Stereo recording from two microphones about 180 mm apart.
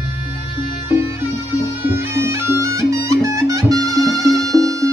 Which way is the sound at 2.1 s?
15° right (ahead or behind).